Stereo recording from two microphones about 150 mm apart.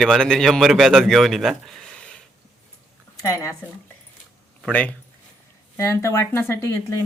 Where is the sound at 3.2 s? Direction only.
20° left (ahead or behind).